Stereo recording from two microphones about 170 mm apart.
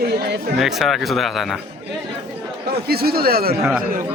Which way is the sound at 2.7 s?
65° right (ahead or behind).